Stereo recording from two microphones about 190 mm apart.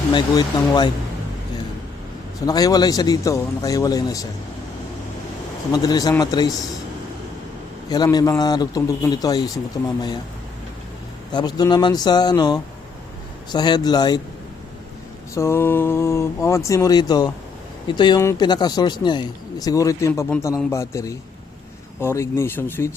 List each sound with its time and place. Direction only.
0.1 s speech: 20° left (ahead or behind)
2.5 s speech: 20° left (ahead or behind)
5.7 s speech: 20° left (ahead or behind)
7.9 s speech: 20° left (ahead or behind)
11.3 s speech: 20° left (ahead or behind)
15.4 s speech: 15° left (ahead or behind)